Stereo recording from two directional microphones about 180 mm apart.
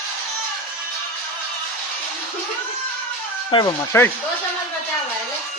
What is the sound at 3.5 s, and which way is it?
Speech, 25° left (ahead or behind).